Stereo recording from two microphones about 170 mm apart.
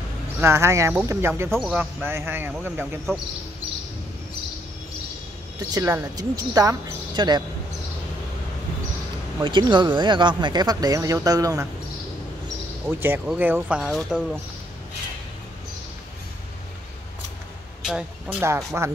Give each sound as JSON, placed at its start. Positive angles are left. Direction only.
{"t": 0.4, "sound": "speech", "side_deg": -15}
{"t": 1.6, "sound": "speech", "side_deg": 0}
{"t": 2.0, "sound": "speech", "side_deg": -15}
{"t": 5.6, "sound": "speech", "side_deg": -15}
{"t": 9.4, "sound": "speech", "side_deg": -25}
{"t": 13.0, "sound": "speech", "side_deg": -10}
{"t": 17.8, "sound": "speech", "side_deg": -5}